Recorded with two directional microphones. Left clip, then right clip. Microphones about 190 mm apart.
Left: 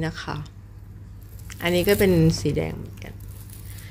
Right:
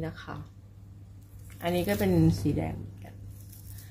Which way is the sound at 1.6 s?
20° left (ahead or behind).